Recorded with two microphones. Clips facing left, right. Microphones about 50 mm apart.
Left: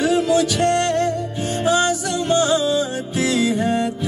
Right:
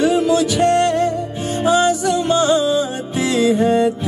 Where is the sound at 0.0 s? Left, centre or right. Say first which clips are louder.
Right 2 dB; centre.